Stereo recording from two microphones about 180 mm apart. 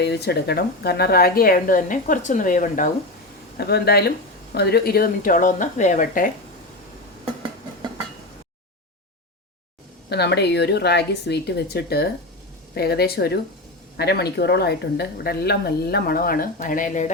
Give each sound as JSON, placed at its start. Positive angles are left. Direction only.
{"t": 0.0, "sound": "a woman's voice", "side_deg": 65}
{"t": 3.6, "sound": "a woman's voice", "side_deg": 65}
{"t": 10.1, "sound": "speech", "side_deg": 70}